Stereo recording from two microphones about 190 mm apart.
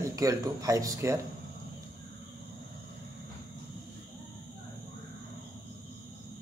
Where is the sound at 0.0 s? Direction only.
20° right (ahead or behind).